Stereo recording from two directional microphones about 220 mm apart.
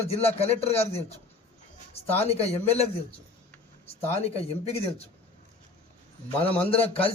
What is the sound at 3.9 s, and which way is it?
Speech, 25° left (ahead or behind).